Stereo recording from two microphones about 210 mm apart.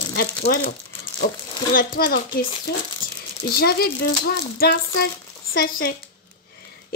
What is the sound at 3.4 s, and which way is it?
A woman's voice, 45° left (ahead or behind).